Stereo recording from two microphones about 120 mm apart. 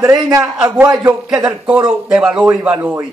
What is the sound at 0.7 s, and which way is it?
Speech, 25° right (ahead or behind).